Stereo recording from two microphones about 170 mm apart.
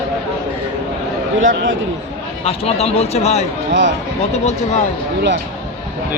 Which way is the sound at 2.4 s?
35° left (ahead or behind).